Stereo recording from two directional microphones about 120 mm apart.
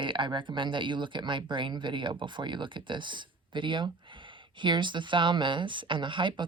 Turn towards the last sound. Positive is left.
turn(degrees=-45)  # may be behind; listen again after turning